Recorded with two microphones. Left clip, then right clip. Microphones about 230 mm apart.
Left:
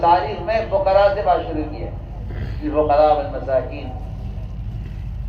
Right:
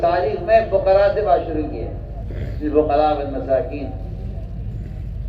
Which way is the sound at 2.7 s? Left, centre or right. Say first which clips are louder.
Left 1 dB; left.